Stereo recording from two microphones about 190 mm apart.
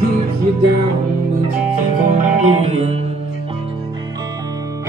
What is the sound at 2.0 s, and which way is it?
Music, 40° right (ahead or behind).